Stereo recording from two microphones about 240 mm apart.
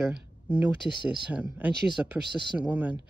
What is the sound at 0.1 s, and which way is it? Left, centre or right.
Speech, centre.